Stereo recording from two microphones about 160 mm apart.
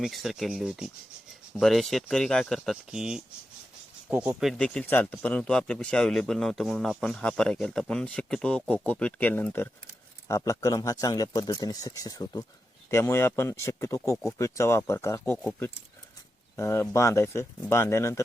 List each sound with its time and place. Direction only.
0.0 s speech: centre (ahead or behind)
4.4 s speech: centre (ahead or behind); by 18.2 s 15° left (ahead or behind)